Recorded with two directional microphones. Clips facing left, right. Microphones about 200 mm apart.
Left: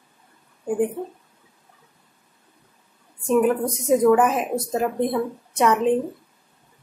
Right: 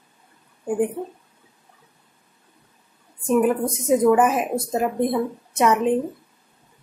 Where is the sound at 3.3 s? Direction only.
5° right (ahead or behind).